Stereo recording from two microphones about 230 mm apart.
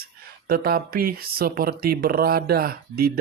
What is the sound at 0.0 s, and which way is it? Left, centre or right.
Speech, right.